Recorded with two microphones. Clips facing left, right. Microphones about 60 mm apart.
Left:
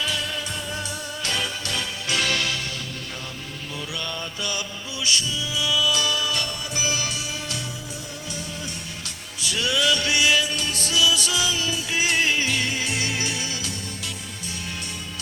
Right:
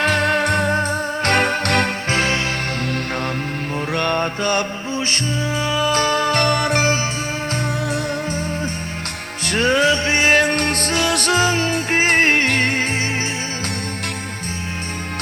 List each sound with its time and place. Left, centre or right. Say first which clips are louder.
0.0 s music: right 11 dB; right
2.0 s music: right 5 dB; right
3.9 s music: right 13 dB; right
9.4 s music: right 7 dB; right